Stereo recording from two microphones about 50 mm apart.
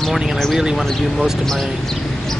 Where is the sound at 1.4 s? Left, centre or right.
Centre.